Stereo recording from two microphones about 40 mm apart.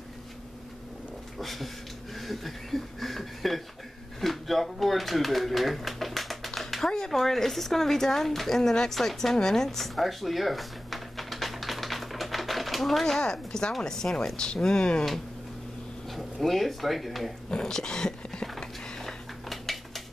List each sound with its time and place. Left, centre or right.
1.4 s speech: centre
4.2 s a sound: centre
7.1 s speech: centre
13.0 s speech: centre
16.1 s speech: centre
17.5 s speech: centre
18.6 s a sound: centre